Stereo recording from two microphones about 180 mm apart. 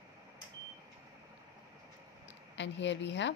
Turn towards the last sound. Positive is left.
turn(degrees=80)